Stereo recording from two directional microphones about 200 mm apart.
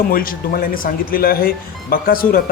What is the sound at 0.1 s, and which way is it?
Speech, 45° left (ahead or behind).